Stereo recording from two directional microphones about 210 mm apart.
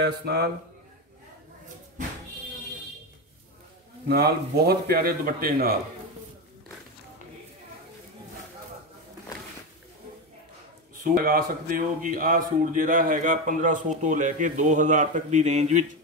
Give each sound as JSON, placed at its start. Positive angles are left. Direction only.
{"t": 0.0, "sound": "a man's voice", "side_deg": -50}
{"t": 4.1, "sound": "a man's voice", "side_deg": -45}
{"t": 11.2, "sound": "a man's voice", "side_deg": -40}